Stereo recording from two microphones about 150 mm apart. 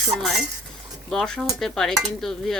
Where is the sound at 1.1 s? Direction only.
5° left (ahead or behind).